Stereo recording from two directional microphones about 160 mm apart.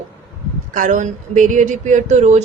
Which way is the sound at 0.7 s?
55° right (ahead or behind).